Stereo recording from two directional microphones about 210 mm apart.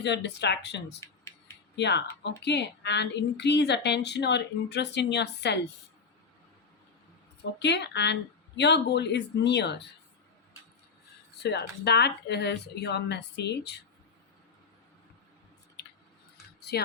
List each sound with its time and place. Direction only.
0.0 s a woman's voice: 55° left (ahead or behind)
7.6 s a woman's voice: 55° left (ahead or behind)
11.4 s a woman's voice: 50° left (ahead or behind)